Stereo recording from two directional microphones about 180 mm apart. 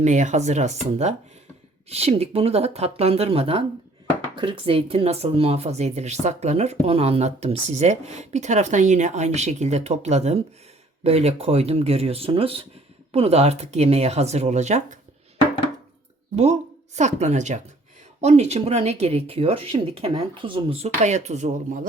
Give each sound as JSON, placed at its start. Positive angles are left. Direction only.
{"t": 0.0, "sound": "speech", "side_deg": -40}
{"t": 16.3, "sound": "speech", "side_deg": -35}